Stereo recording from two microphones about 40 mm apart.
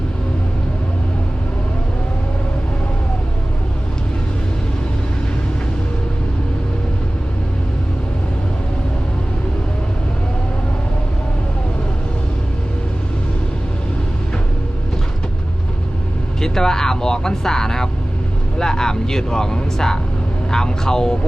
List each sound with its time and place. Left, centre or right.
16.4 s speech: centre